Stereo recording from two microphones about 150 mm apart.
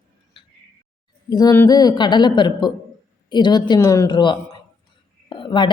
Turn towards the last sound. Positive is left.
turn(degrees=35)  # may be behind; listen again after turning